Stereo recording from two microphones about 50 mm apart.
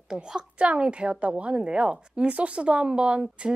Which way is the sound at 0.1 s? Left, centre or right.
Centre.